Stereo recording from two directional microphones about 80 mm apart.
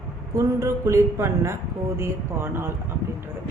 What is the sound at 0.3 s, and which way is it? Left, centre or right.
A woman's voice, right.